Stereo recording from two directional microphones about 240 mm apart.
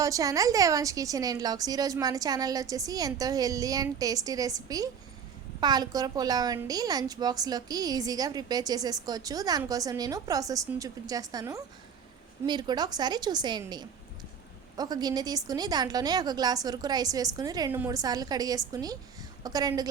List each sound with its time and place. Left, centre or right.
0.0 s a woman's voice: centre